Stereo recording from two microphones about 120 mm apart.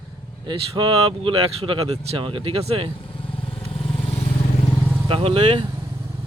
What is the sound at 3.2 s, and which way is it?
Vehicle, 50° left (ahead or behind).